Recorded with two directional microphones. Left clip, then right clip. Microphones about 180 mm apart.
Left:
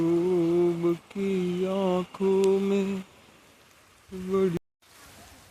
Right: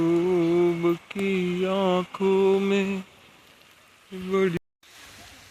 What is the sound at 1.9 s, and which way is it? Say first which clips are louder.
Mantra: right 3 dB; 25° right (ahead or behind).